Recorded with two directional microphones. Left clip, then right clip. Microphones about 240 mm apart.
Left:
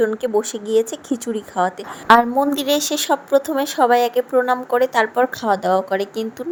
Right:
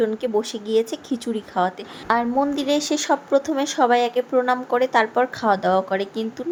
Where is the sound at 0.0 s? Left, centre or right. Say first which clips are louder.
Left 3 dB; centre.